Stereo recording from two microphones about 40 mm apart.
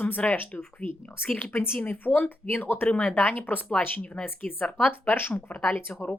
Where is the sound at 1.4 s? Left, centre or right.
Left.